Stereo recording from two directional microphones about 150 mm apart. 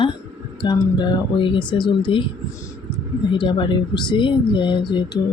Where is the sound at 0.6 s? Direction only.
30° left (ahead or behind).